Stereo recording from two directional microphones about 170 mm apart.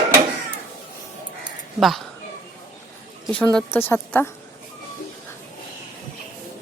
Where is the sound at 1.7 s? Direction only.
Centre (ahead or behind).